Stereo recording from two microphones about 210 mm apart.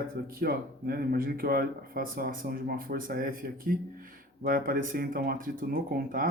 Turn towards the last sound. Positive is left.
turn(degrees=-45)  # may be behind; listen again after turning